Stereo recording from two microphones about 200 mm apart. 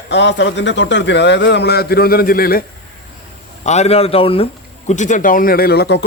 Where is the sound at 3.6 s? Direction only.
35° left (ahead or behind).